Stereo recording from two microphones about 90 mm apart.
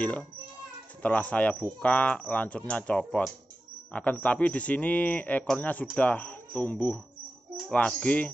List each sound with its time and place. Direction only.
0.0 s speech: 15° left (ahead or behind)